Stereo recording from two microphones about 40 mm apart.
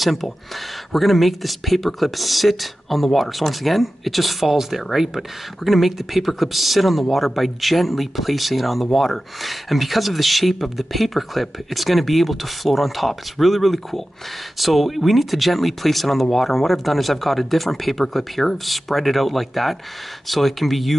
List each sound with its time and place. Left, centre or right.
0.0 s speech: centre